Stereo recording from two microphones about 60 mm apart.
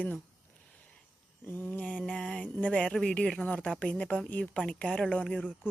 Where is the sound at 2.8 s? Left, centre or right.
Centre.